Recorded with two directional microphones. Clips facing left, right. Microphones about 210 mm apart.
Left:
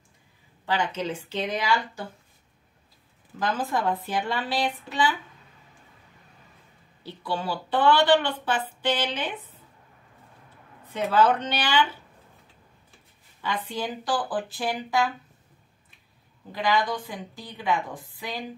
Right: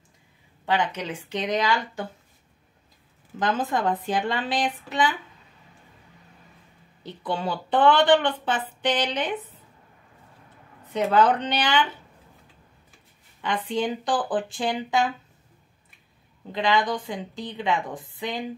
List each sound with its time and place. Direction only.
0.7 s speech: 20° right (ahead or behind)
3.3 s speech: 20° right (ahead or behind)
7.0 s speech: 20° right (ahead or behind)
10.9 s speech: 20° right (ahead or behind)
13.4 s speech: 20° right (ahead or behind)
16.5 s speech: 20° right (ahead or behind)